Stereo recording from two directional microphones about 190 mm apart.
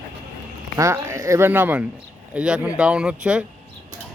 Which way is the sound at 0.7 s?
15° right (ahead or behind).